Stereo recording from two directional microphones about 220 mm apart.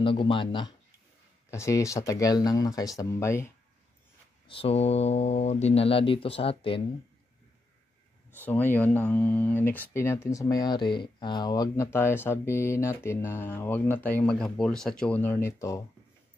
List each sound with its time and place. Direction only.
0.0 s speech: 25° left (ahead or behind)
4.5 s speech: 25° left (ahead or behind)
8.3 s speech: 10° left (ahead or behind)